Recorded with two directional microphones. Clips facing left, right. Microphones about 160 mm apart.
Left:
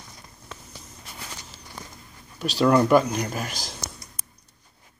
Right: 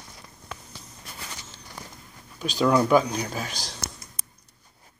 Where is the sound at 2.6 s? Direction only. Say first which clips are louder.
Left 2 dB; centre (ahead or behind).